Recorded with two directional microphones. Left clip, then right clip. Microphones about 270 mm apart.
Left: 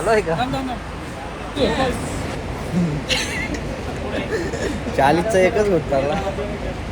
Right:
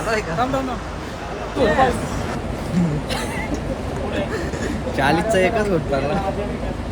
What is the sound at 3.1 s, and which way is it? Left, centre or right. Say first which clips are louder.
Speech: left 4 dB; right.